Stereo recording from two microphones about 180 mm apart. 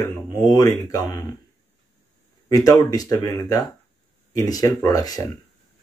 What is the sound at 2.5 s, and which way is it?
Speech, 20° left (ahead or behind).